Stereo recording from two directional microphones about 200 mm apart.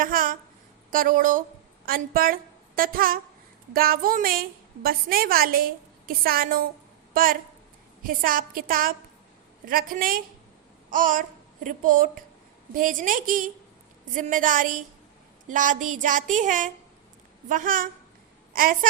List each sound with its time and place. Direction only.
0.0 s a woman's voice: 45° right (ahead or behind)